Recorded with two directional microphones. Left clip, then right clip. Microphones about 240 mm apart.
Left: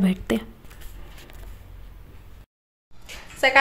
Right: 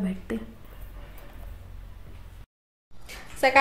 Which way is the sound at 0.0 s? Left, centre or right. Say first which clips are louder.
Left 8 dB; left.